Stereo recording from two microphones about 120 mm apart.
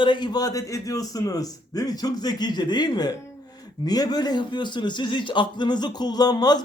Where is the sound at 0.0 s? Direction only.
40° left (ahead or behind).